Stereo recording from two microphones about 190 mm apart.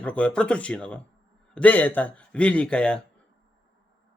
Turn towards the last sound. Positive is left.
turn(degrees=5)  # may be behind; listen again after turning